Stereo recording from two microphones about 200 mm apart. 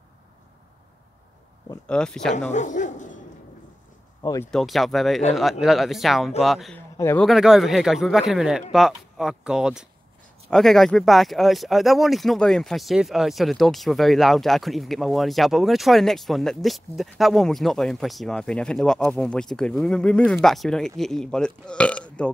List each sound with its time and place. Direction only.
1.9 s speech: 5° left (ahead or behind)
2.5 s dog: 40° left (ahead or behind)
4.2 s speech: 15° left (ahead or behind)
4.5 s speech: centre (ahead or behind)
7.0 s speech: 15° left (ahead or behind)
7.2 s speech: centre (ahead or behind)